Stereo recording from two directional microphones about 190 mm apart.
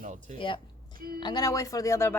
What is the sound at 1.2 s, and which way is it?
A woman's voice, 20° left (ahead or behind).